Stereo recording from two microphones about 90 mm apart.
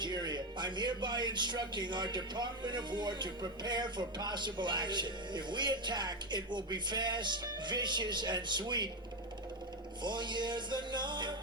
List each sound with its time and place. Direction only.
0.0 s speech: 55° right (ahead or behind)
10.0 s speech: 55° right (ahead or behind)